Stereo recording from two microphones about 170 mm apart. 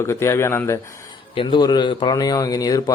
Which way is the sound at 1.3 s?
25° left (ahead or behind).